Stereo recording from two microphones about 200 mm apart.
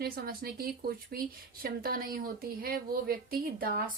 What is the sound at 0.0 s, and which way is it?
Speech, 50° right (ahead or behind).